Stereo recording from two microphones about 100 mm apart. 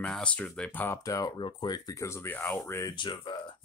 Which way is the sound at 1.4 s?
55° left (ahead or behind).